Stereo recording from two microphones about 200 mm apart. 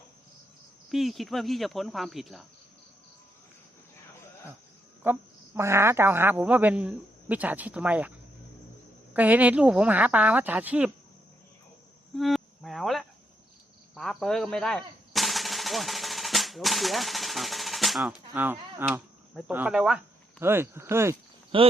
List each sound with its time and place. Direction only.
0.9 s speech: centre (ahead or behind)
5.0 s speech: 10° right (ahead or behind)
9.1 s speech: 10° right (ahead or behind)
12.1 s insect: centre (ahead or behind)
13.9 s a sound: centre (ahead or behind)
18.8 s speech: 5° right (ahead or behind)
21.5 s speech: 25° right (ahead or behind)